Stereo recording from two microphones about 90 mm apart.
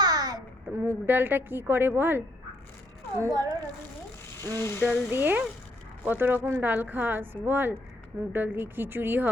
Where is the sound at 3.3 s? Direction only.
45° right (ahead or behind).